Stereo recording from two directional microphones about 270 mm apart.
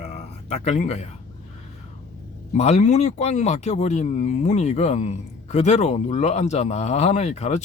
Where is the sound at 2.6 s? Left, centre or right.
Left.